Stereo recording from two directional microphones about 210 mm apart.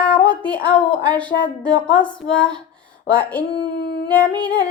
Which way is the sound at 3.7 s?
50° left (ahead or behind).